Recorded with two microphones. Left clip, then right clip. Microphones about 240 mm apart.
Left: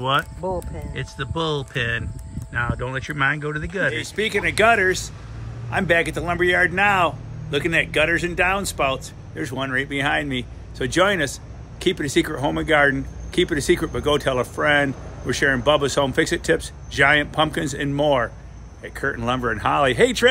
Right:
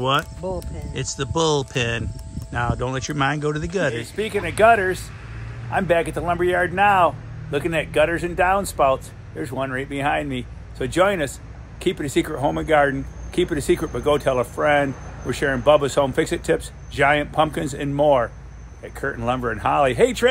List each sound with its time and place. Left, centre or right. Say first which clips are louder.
0.0 s speech: even; centre